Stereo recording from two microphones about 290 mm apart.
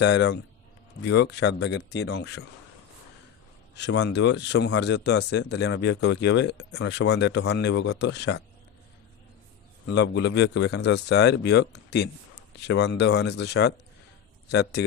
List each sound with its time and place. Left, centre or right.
0.0 s speech: left
3.8 s speech: left
9.8 s speech: left